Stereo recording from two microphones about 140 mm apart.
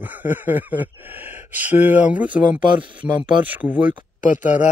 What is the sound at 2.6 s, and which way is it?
Speech, 35° right (ahead or behind).